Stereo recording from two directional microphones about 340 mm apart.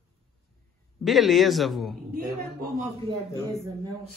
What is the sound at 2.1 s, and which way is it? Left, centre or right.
Speech, right.